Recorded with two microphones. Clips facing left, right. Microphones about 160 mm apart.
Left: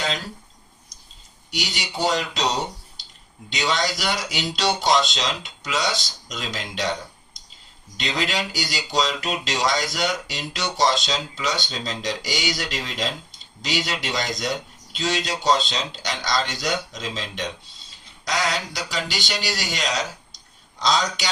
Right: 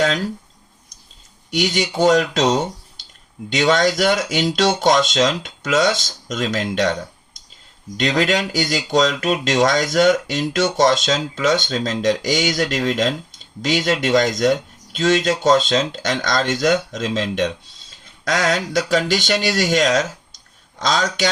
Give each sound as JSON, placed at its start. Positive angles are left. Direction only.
{"t": 1.5, "sound": "speech", "side_deg": -50}
{"t": 3.6, "sound": "speech", "side_deg": -50}
{"t": 7.9, "sound": "speech", "side_deg": -50}